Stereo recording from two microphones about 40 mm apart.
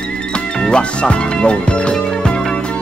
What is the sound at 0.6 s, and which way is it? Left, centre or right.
Speech, left.